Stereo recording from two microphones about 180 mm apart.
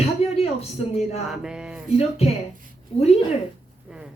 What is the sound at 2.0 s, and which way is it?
Speech, 35° left (ahead or behind).